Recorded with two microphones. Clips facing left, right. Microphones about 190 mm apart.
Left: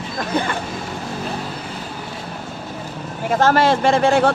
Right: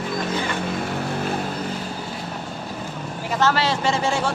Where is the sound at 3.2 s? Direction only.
50° left (ahead or behind).